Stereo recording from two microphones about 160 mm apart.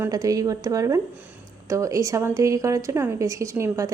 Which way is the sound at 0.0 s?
20° right (ahead or behind).